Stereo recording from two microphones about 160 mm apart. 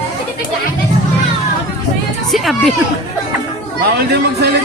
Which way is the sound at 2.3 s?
Centre (ahead or behind).